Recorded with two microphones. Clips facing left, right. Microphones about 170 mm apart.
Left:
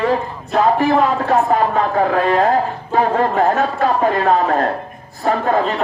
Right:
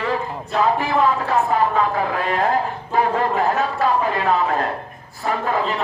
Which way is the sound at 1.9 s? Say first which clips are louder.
Left 6 dB; 45° left (ahead or behind).